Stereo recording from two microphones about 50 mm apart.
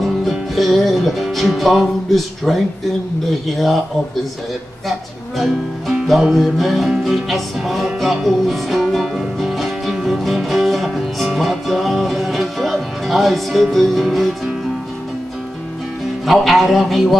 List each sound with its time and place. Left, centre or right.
0.0 s music: centre
3.3 s a man's voice: centre
5.4 s a man's voice: centre
7.1 s music: centre
16.3 s a man's voice: centre